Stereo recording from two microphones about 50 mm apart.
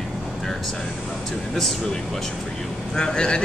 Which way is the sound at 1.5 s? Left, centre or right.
Centre.